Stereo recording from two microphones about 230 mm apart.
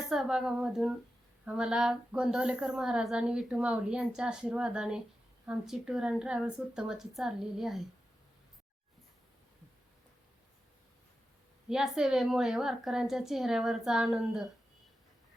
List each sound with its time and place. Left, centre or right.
0.1 s a woman's voice: centre
11.7 s a woman's voice: centre